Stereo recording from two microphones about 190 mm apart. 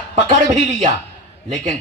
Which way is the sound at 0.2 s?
40° right (ahead or behind).